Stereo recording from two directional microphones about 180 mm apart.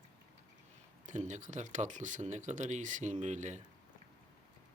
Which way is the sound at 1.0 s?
45° right (ahead or behind).